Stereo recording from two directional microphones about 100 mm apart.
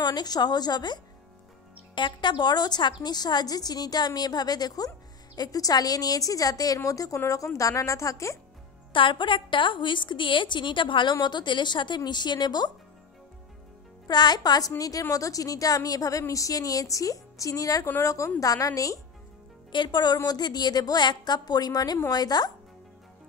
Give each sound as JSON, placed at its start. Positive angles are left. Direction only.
{"t": 0.0, "sound": "a woman's voice", "side_deg": 45}
{"t": 8.9, "sound": "a woman's voice", "side_deg": 55}
{"t": 14.0, "sound": "a woman's voice", "side_deg": 45}
{"t": 19.7, "sound": "a woman's voice", "side_deg": 50}